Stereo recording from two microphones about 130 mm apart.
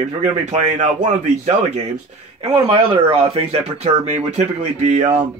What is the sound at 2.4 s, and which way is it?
Speech, 45° right (ahead or behind).